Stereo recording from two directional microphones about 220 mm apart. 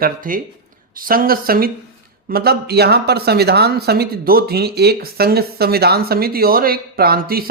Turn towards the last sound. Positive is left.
turn(degrees=-40)  # may be behind; listen again after turning